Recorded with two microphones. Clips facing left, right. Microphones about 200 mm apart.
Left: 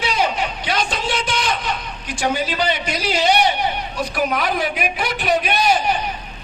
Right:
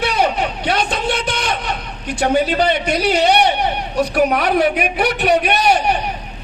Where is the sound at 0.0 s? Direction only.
60° right (ahead or behind).